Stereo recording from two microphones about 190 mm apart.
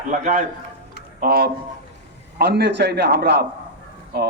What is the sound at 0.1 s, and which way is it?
A man's voice, 45° right (ahead or behind).